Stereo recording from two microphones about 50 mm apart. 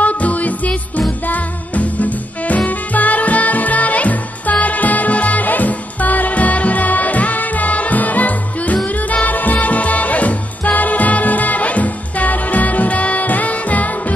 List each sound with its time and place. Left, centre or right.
0.0 s music: left